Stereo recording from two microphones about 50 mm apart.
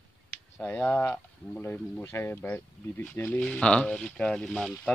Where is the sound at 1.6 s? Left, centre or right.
Left.